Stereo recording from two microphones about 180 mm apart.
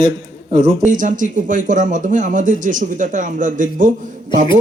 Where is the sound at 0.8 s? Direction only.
45° right (ahead or behind).